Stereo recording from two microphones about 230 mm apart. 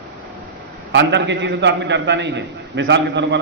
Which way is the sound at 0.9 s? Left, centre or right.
Right.